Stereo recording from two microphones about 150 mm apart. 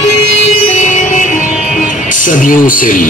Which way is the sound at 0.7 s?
55° left (ahead or behind).